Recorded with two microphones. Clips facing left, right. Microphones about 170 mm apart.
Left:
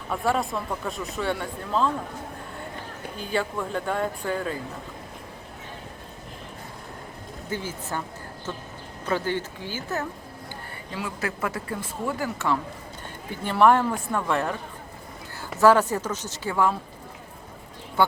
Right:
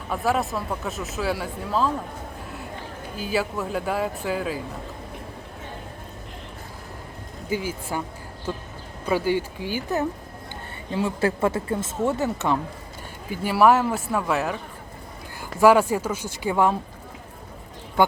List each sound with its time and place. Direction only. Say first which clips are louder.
0.1 s speech: right 1 dB; centre (ahead or behind)
3.2 s speech: right 2 dB; 5° right (ahead or behind)
7.5 s speech: right 4 dB; 10° right (ahead or behind)
9.0 s speech: right 4 dB; 10° right (ahead or behind)
10.9 s speech: right 8 dB; 30° right (ahead or behind)
13.3 s speech: right 1 dB; 5° right (ahead or behind)
15.6 s speech: right 2 dB; 10° right (ahead or behind)